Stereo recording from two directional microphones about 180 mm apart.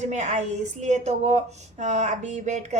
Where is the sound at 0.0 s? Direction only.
40° right (ahead or behind).